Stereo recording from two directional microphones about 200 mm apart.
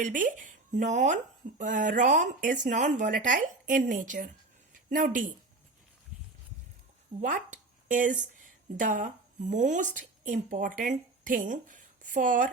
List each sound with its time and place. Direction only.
0.0 s speech: 40° right (ahead or behind)
7.2 s speech: 40° right (ahead or behind)